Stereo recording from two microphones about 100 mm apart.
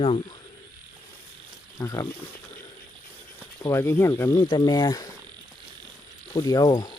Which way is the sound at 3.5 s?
30° left (ahead or behind).